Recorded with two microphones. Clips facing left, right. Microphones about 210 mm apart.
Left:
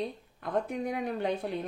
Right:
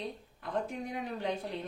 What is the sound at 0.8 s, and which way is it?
Speech, 60° left (ahead or behind).